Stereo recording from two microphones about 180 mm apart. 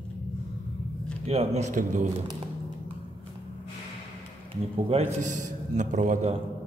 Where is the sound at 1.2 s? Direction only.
35° right (ahead or behind).